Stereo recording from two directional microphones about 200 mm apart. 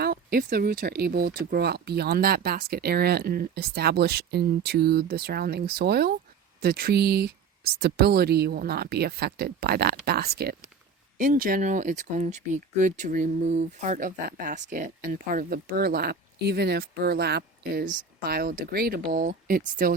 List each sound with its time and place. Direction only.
0.0 s speech: 50° right (ahead or behind)